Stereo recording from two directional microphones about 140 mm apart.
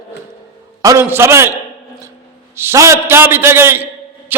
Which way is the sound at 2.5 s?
20° right (ahead or behind).